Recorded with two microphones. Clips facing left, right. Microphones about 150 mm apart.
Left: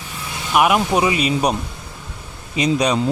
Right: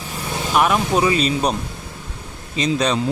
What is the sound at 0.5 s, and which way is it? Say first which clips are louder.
Speech: left 2 dB; 10° left (ahead or behind).